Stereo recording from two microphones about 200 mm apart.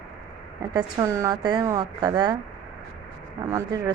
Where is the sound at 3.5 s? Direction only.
20° right (ahead or behind).